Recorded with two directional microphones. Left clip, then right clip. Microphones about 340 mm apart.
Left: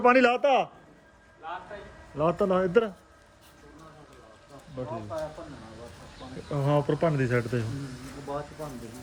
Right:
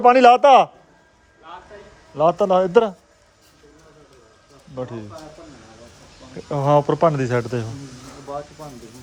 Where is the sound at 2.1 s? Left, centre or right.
Centre.